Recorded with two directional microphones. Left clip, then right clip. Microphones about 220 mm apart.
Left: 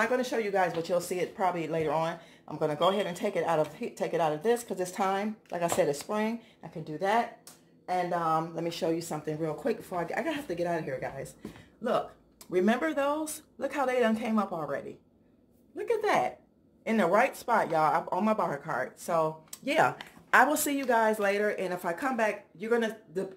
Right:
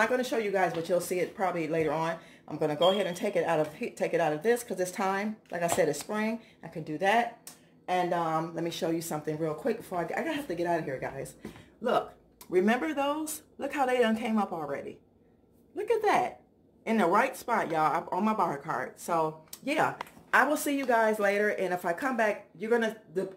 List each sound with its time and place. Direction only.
0.0 s speech: centre (ahead or behind)
12.4 s speech: 5° left (ahead or behind)
19.6 s speech: 25° left (ahead or behind)
20.6 s speech: 10° left (ahead or behind)